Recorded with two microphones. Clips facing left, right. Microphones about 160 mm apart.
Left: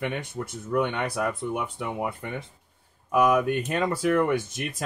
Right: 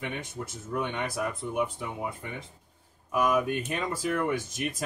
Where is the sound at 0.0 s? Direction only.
65° left (ahead or behind).